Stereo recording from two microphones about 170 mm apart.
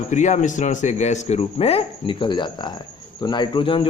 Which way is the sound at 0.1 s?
45° left (ahead or behind).